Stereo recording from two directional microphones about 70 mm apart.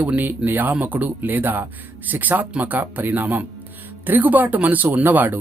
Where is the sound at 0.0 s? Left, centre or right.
Right.